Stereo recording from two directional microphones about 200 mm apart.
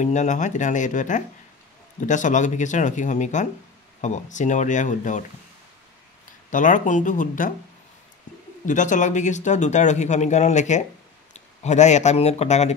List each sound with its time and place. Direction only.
0.0 s speech: 35° left (ahead or behind)
6.5 s speech: 40° left (ahead or behind)
8.6 s speech: 40° left (ahead or behind)